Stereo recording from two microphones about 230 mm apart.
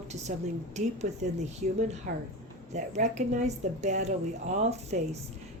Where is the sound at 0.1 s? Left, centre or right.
Right.